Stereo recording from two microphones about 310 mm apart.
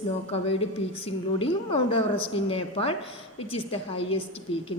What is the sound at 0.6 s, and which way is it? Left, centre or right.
A woman's voice, centre.